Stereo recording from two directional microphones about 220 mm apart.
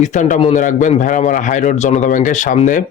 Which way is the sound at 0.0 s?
35° left (ahead or behind).